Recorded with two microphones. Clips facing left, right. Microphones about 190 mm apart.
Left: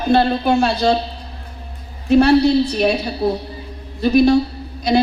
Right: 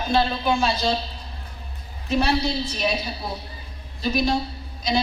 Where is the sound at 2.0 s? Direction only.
60° left (ahead or behind).